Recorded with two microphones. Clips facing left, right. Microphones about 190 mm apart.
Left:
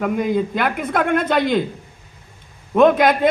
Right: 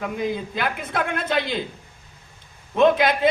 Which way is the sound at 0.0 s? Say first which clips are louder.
Left 7 dB; 55° left (ahead or behind).